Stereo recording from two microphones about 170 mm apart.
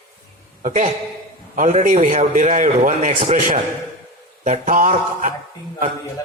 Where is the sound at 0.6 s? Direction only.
45° right (ahead or behind).